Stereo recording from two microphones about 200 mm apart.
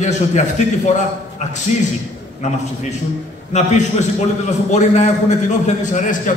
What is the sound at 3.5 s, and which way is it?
A man's voice, 35° left (ahead or behind).